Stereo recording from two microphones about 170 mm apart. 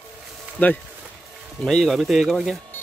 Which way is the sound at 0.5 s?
10° left (ahead or behind).